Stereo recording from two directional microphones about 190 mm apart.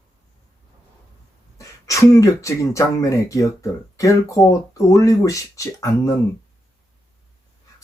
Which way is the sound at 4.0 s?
15° left (ahead or behind).